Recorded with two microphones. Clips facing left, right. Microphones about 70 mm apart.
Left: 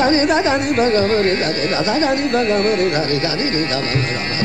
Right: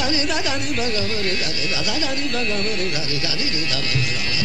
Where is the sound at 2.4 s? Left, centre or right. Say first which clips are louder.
Left 9 dB; left.